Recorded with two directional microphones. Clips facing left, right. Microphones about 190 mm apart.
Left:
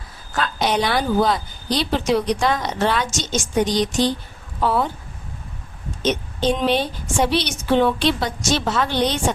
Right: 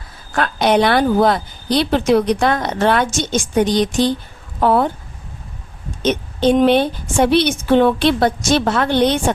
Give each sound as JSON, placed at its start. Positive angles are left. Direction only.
{"t": 0.3, "sound": "a woman's voice", "side_deg": -60}
{"t": 6.0, "sound": "a woman's voice", "side_deg": -55}